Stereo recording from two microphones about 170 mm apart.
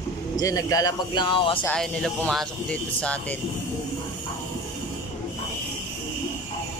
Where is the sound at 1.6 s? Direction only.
5° left (ahead or behind).